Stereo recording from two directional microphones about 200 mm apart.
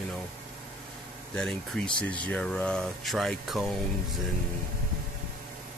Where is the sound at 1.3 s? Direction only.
5° left (ahead or behind).